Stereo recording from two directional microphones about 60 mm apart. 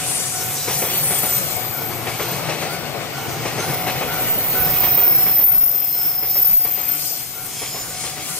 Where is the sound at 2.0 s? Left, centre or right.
Centre.